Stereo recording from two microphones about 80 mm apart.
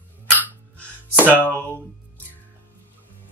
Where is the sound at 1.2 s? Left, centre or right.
Left.